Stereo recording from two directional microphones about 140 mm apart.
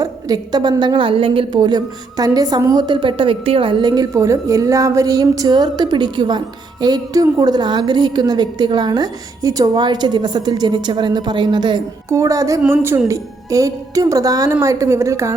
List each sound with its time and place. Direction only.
0.0 s a woman's voice: 30° right (ahead or behind)